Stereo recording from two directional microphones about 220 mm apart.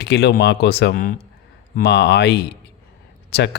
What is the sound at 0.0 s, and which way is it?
Speech, 50° left (ahead or behind).